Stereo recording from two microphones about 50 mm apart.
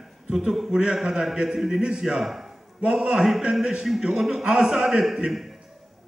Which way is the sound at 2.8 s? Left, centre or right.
Right.